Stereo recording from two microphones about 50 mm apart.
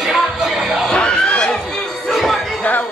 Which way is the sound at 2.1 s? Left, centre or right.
Centre.